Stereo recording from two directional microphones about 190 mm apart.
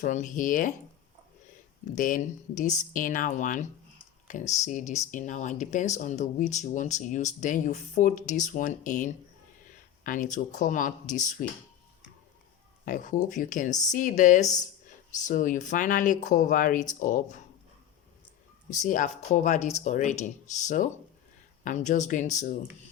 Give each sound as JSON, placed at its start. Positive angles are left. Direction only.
{"t": 0.0, "sound": "speech", "side_deg": 40}
{"t": 2.0, "sound": "speech", "side_deg": 45}
{"t": 12.8, "sound": "speech", "side_deg": 45}
{"t": 18.8, "sound": "speech", "side_deg": 40}